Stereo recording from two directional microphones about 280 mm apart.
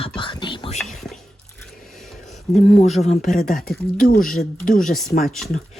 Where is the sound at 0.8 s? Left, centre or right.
Centre.